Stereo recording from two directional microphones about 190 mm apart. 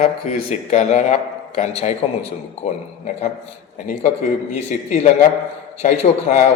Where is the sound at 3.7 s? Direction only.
40° left (ahead or behind).